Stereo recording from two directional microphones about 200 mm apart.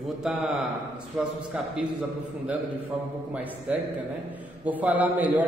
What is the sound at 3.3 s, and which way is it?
A man's voice, 5° right (ahead or behind).